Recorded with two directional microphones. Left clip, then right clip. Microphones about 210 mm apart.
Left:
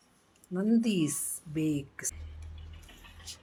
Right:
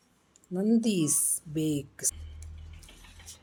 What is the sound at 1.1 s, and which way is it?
Speech, 20° right (ahead or behind).